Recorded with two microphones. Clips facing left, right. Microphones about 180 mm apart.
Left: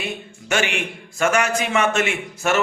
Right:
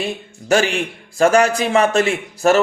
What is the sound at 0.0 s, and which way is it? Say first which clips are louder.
A man's voice: right 5 dB; 35° right (ahead or behind).